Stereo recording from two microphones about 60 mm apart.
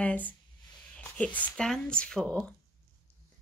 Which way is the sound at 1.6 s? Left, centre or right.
Centre.